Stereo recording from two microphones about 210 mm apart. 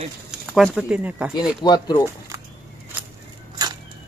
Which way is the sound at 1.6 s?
20° left (ahead or behind).